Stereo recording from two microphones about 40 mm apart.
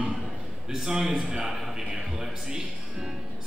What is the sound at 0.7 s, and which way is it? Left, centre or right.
Speech, centre.